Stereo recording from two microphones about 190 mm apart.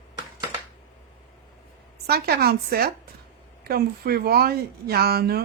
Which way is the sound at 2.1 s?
55° right (ahead or behind).